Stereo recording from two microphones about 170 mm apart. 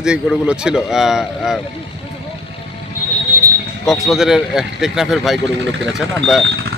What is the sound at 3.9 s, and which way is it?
Speech, centre (ahead or behind).